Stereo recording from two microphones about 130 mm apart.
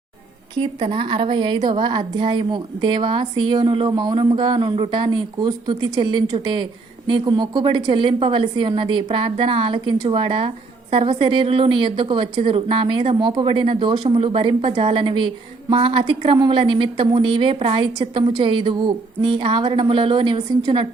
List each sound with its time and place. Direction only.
0.6 s a woman's voice: 40° right (ahead or behind)